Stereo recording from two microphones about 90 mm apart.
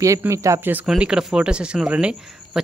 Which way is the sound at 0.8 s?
10° right (ahead or behind).